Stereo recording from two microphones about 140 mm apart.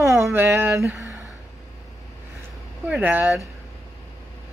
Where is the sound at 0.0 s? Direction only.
20° right (ahead or behind).